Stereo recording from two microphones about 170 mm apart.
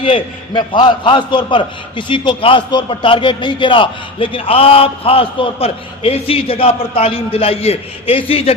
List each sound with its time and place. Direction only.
0.0 s a man's voice: 30° left (ahead or behind)